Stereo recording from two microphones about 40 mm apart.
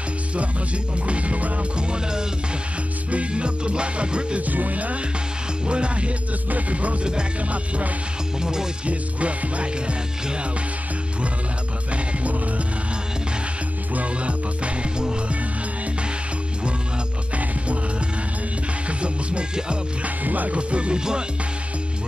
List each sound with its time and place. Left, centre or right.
1.0 s music: right
1.8 s music: right
4.4 s music: right
5.7 s music: right
8.4 s music: centre
8.8 s music: right
11.9 s music: right
13.9 s music: right
18.9 s music: right
20.2 s music: right
20.5 s music: right